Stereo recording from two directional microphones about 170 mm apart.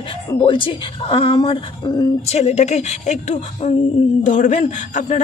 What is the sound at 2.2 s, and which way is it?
A man's voice, 40° left (ahead or behind).